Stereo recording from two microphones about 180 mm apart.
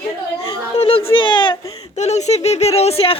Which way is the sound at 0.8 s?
30° left (ahead or behind).